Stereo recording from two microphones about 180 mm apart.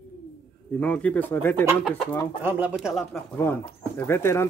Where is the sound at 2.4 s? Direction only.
10° right (ahead or behind).